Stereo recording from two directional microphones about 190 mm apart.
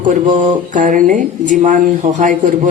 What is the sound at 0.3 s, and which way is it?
Mantra, 25° right (ahead or behind).